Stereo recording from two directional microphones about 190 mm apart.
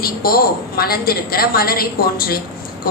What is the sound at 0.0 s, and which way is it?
A woman's voice, 50° left (ahead or behind).